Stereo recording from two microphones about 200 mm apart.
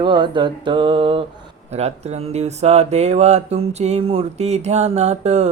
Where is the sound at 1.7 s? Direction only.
35° right (ahead or behind).